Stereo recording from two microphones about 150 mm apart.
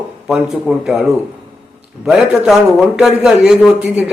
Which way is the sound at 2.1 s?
Centre (ahead or behind).